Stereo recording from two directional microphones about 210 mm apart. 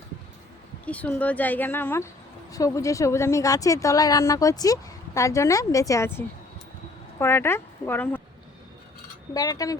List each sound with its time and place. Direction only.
0.9 s a woman's voice: 5° left (ahead or behind)
9.3 s speech: 15° left (ahead or behind)